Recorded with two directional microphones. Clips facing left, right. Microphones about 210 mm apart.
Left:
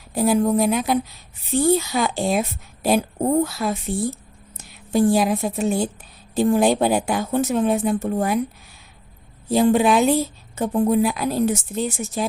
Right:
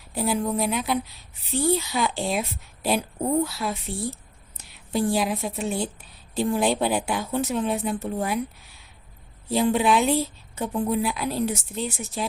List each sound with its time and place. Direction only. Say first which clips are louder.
0.1 s a woman's voice: left 7 dB; 45° left (ahead or behind)
9.5 s a woman's voice: left 5 dB; 45° left (ahead or behind)